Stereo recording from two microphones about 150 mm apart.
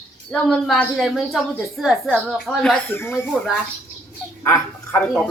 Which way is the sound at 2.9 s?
15° left (ahead or behind).